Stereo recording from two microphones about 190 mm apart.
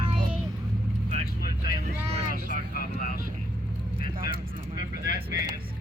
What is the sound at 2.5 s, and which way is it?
Vehicle, 50° left (ahead or behind).